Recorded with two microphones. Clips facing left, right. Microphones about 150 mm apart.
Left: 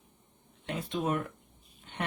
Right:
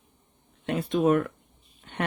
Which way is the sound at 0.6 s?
65° right (ahead or behind).